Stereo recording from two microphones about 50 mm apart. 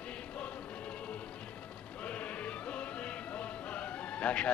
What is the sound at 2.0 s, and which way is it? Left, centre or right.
Music, left.